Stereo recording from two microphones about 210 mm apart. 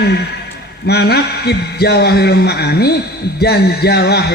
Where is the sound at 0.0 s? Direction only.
50° left (ahead or behind).